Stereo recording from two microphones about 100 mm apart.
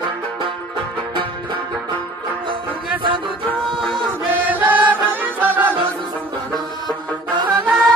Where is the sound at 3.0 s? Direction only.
55° right (ahead or behind).